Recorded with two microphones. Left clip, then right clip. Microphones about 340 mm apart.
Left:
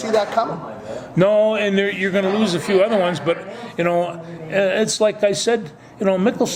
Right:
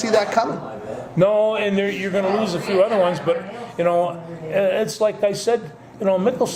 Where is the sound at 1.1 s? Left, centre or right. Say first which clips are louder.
Left 2 dB; left.